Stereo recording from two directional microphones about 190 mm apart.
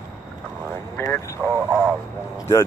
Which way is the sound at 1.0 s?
15° left (ahead or behind).